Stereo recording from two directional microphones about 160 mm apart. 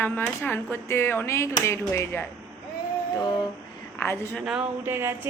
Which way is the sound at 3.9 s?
15° left (ahead or behind).